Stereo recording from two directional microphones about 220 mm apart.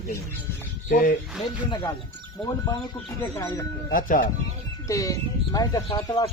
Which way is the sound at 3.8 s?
40° left (ahead or behind).